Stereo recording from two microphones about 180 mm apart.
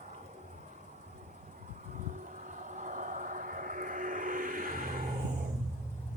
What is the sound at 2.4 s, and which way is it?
Vehicle, 45° right (ahead or behind).